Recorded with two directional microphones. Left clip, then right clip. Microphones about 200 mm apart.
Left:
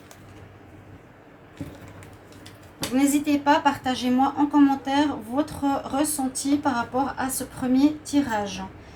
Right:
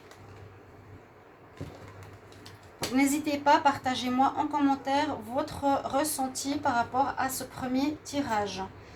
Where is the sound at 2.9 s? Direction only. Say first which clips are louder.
Left 5 dB; 45° right (ahead or behind).